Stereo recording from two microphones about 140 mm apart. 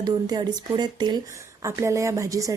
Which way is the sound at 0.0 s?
30° right (ahead or behind).